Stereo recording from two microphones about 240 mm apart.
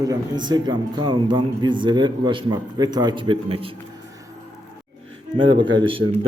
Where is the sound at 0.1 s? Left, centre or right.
Centre.